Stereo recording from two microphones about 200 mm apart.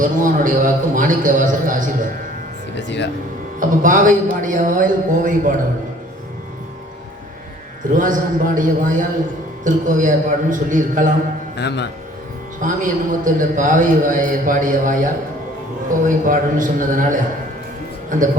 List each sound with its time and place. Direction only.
0.0 s a man's voice: 40° right (ahead or behind)
2.7 s speech: 60° left (ahead or behind)
3.6 s a man's voice: 40° right (ahead or behind)
7.9 s a man's voice: 40° right (ahead or behind)
12.6 s a man's voice: 40° right (ahead or behind)
16.0 s a man's voice: 40° right (ahead or behind)